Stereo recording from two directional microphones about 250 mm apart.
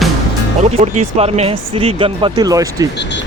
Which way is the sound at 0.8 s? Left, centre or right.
Right.